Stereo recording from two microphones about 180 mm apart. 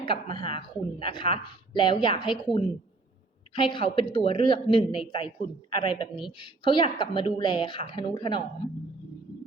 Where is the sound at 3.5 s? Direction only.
30° left (ahead or behind).